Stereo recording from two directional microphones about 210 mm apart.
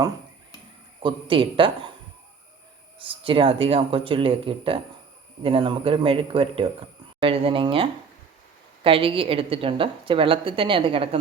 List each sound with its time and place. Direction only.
1.0 s speech: 25° right (ahead or behind)
3.1 s speech: 25° right (ahead or behind)